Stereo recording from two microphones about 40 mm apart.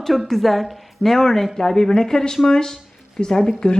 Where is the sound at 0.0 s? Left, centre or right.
Centre.